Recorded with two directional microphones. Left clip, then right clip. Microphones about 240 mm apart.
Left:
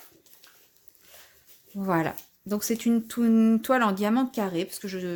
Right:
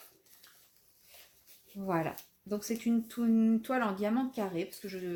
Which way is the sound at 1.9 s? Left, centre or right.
Left.